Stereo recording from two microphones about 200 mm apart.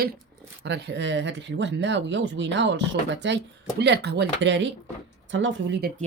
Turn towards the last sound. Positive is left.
turn(degrees=-65)  # may be behind; listen again after turning